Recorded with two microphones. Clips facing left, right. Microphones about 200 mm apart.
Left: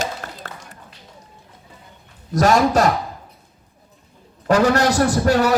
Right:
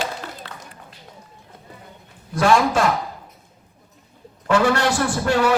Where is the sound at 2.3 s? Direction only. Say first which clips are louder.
Left 2 dB; 40° left (ahead or behind).